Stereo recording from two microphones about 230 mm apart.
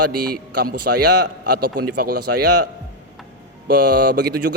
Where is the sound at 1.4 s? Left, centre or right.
Right.